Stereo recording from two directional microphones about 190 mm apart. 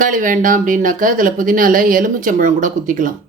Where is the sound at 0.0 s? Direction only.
45° right (ahead or behind).